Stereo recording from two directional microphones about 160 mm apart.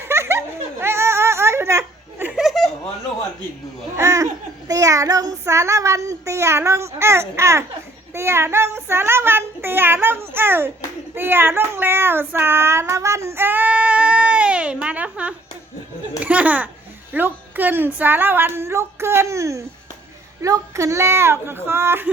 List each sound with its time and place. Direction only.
0.1 s giggle: 15° right (ahead or behind)
2.3 s a sound: centre (ahead or behind)
3.9 s a sound: 20° right (ahead or behind)
4.7 s child singing: 20° right (ahead or behind)
8.1 s a child's voice: 15° right (ahead or behind)
11.1 s child singing: 15° right (ahead or behind)
16.2 s a child's voice: 10° right (ahead or behind)